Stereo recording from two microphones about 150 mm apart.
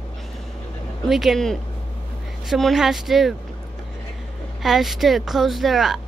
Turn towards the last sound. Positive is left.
turn(degrees=0)  # may be behind; listen again after turning